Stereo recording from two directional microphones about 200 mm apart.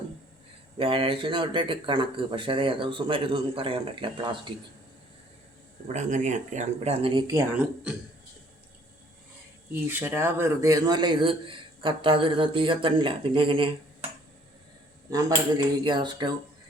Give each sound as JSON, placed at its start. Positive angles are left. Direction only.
{"t": 0.8, "sound": "a man's voice", "side_deg": -25}
{"t": 5.9, "sound": "speech", "side_deg": -35}
{"t": 9.8, "sound": "a man's voice", "side_deg": -10}
{"t": 15.1, "sound": "a man's voice", "side_deg": -20}